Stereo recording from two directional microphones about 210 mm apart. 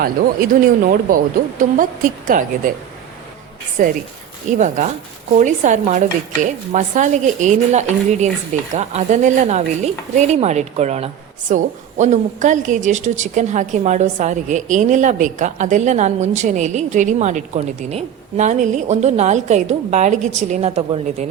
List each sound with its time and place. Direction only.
1.1 s a woman's voice: 40° right (ahead or behind)
3.8 s a woman's voice: 40° right (ahead or behind)